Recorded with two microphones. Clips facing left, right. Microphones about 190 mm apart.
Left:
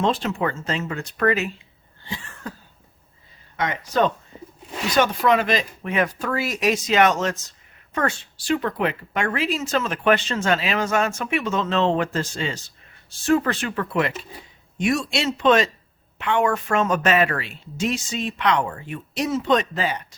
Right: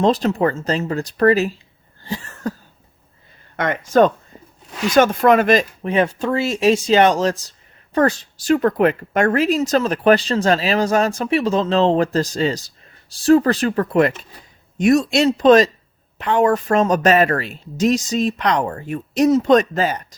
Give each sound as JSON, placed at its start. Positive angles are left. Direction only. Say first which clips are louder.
{"t": 0.0, "sound": "speech", "louder": "right 6 dB", "side_deg": -40}
{"t": 2.0, "sound": "cough", "louder": "right 8 dB", "side_deg": -40}
{"t": 3.6, "sound": "speech", "louder": "right 7 dB", "side_deg": -50}
{"t": 5.8, "sound": "speech", "louder": "right 5 dB", "side_deg": -30}